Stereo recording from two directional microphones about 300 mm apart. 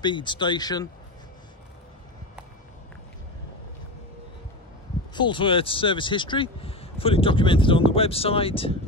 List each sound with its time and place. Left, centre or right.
0.0 s speech: centre
5.1 s speech: centre